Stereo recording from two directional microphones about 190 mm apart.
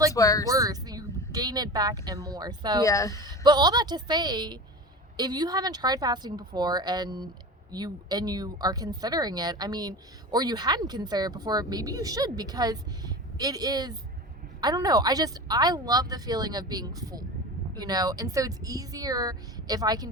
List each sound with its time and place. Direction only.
0.1 s a woman's voice: 20° left (ahead or behind)
0.4 s a woman's voice: 20° right (ahead or behind)
2.8 s a woman's voice: 15° left (ahead or behind)
3.2 s a woman's voice: 20° right (ahead or behind)